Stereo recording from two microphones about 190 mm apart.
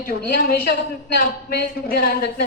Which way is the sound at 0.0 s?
50° left (ahead or behind).